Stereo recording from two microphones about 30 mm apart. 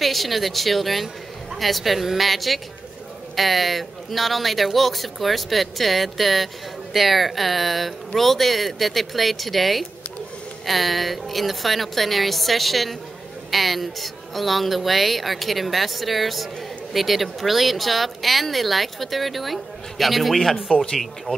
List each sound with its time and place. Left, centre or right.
0.0 s speech: centre
20.7 s speech: centre
21.3 s speech: left